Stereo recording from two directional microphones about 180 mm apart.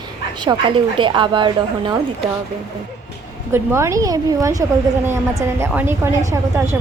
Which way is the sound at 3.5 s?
15° right (ahead or behind).